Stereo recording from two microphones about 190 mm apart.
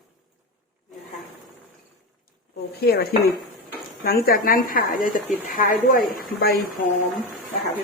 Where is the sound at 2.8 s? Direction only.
55° left (ahead or behind).